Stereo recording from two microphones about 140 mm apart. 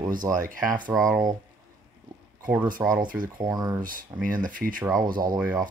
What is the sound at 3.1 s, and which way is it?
Speech, 80° right.